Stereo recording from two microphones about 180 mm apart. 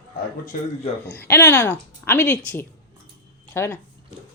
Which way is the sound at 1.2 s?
10° left (ahead or behind).